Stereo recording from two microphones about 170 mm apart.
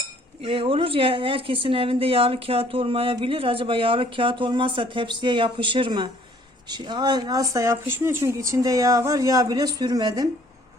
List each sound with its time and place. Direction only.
0.4 s a woman's voice: 35° right (ahead or behind)